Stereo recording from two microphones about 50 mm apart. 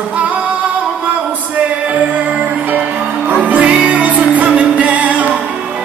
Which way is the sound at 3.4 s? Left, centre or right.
Right.